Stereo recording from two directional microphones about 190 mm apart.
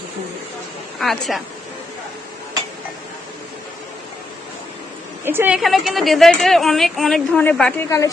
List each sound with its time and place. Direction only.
0.9 s a woman's voice: centre (ahead or behind)
5.2 s a woman's voice: 10° right (ahead or behind)
5.5 s a woman's voice: centre (ahead or behind)
7.9 s a woman's voice: 15° left (ahead or behind)